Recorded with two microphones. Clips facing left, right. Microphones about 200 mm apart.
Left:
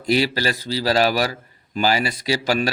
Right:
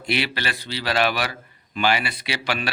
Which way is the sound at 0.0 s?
40° left (ahead or behind).